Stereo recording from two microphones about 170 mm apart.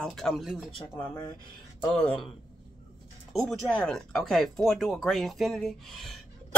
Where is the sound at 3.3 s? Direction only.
Centre (ahead or behind).